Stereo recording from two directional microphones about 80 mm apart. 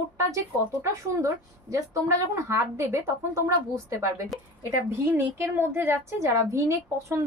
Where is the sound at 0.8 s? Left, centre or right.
Right.